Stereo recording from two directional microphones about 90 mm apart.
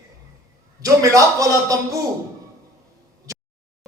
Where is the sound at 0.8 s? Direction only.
35° right (ahead or behind).